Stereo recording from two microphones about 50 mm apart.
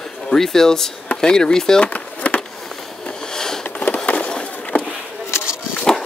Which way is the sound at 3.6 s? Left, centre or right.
Left.